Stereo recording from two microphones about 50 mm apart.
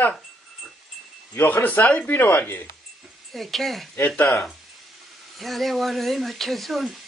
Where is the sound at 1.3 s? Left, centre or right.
Left.